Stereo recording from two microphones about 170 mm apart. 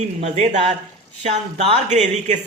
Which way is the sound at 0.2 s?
40° right (ahead or behind).